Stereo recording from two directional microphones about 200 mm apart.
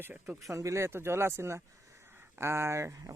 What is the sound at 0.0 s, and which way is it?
Speech, 10° right (ahead or behind).